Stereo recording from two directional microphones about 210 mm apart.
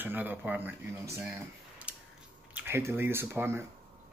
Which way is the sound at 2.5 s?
10° right (ahead or behind).